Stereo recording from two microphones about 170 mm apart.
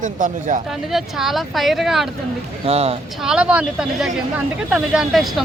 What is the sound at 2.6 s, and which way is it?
Speech, 35° right (ahead or behind).